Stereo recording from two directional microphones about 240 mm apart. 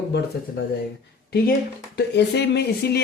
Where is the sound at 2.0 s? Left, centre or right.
Left.